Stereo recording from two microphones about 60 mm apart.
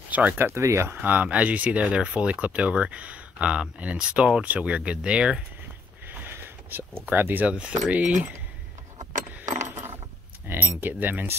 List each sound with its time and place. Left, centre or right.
0.1 s speech: right
0.6 s speech: right
0.9 s speech: right
6.1 s a sound: right
7.1 s speech: right
7.4 s speech: centre
9.7 s coin: right
10.4 s keys jangling: right